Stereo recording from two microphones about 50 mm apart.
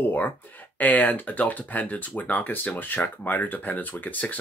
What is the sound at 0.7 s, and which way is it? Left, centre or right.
Speech, left.